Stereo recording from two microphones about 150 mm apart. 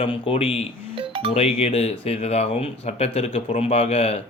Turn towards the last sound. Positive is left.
turn(degrees=40)  # may be behind; listen again after turning